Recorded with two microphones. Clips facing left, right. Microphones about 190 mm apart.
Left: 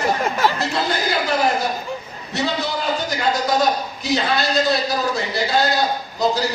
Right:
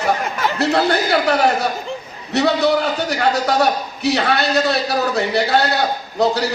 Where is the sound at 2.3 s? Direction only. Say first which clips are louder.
Right 8 dB; 65° right (ahead or behind).